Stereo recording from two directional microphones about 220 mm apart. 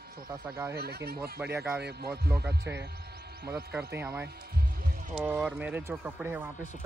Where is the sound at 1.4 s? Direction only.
10° right (ahead or behind).